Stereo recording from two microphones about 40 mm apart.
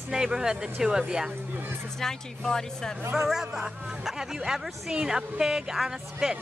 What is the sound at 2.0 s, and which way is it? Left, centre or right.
Speech, centre.